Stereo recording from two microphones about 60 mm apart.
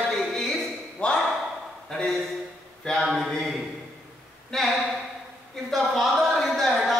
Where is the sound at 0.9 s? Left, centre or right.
Centre.